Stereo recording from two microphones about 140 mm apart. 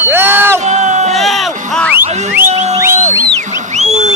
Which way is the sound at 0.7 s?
55° right (ahead or behind).